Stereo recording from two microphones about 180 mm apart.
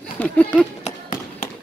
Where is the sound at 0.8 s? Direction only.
45° left (ahead or behind).